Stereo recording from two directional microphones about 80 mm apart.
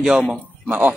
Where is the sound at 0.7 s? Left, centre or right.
Centre.